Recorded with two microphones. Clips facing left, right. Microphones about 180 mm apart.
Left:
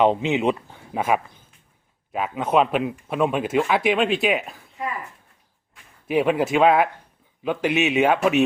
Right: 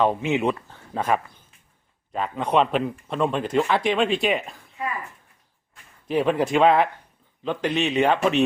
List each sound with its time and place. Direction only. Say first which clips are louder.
0.0 s speech: left 2 dB; 20° left (ahead or behind); by 4.6 s 5° left (ahead or behind)
6.1 s speech: left 1 dB; 10° left (ahead or behind)